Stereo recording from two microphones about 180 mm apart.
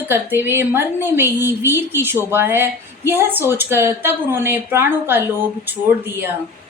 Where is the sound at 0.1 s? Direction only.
10° right (ahead or behind).